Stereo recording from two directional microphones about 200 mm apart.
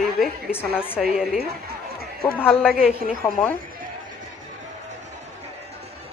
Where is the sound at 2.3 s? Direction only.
5° right (ahead or behind).